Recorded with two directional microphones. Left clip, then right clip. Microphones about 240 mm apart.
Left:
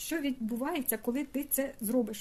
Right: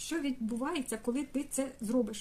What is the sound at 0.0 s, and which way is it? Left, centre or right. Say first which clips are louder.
Speech: left 1 dB; left.